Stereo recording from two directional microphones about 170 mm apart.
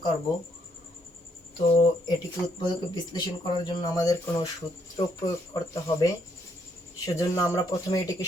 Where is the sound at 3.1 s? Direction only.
25° left (ahead or behind).